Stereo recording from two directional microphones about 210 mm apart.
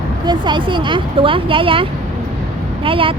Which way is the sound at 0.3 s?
20° right (ahead or behind).